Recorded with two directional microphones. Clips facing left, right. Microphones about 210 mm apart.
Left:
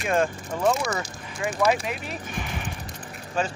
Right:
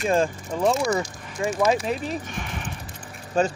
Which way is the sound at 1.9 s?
35° right (ahead or behind).